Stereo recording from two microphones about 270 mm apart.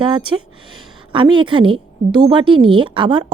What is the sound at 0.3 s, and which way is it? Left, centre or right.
A woman's voice, centre.